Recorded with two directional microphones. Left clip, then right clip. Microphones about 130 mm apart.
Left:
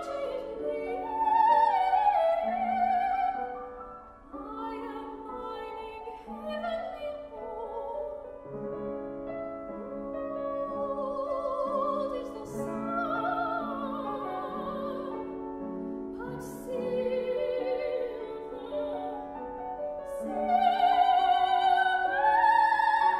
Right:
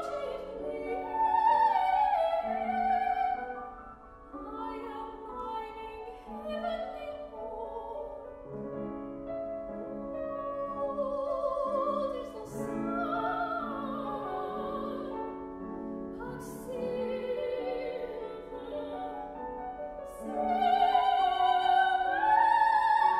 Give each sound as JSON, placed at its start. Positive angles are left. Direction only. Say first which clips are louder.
{"t": 0.7, "sound": "music", "louder": "left 2 dB", "side_deg": 20}
{"t": 6.5, "sound": "music", "louder": "left 1 dB", "side_deg": 20}
{"t": 11.0, "sound": "music", "louder": "even", "side_deg": 20}
{"t": 16.7, "sound": "music", "louder": "left 4 dB", "side_deg": 20}
{"t": 20.2, "sound": "music", "louder": "left 2 dB", "side_deg": 20}